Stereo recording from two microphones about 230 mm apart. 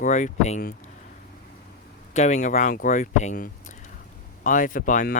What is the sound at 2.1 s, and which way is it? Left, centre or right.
Speech, left.